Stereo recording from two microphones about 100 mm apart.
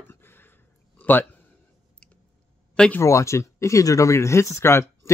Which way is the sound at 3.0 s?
30° left (ahead or behind).